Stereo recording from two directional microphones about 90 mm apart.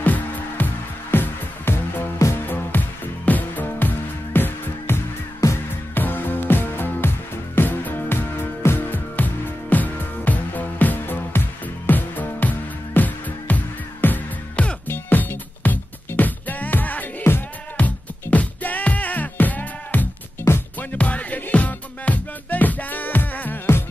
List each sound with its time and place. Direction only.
0.0 s music: 20° left (ahead or behind)